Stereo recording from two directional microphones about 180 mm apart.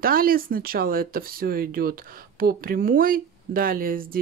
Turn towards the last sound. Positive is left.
turn(degrees=-55)  # may be behind; listen again after turning